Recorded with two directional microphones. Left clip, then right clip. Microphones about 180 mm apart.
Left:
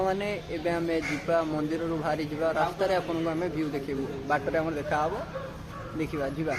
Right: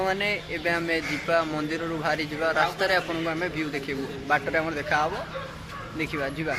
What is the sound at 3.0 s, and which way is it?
Speech, 5° left (ahead or behind).